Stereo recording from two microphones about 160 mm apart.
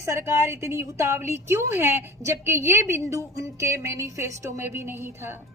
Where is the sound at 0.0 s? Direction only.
15° right (ahead or behind).